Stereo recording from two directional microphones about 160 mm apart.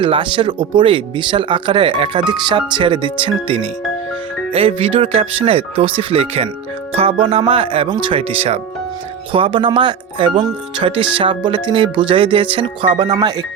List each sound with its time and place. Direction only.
0.0 s speech: 30° right (ahead or behind)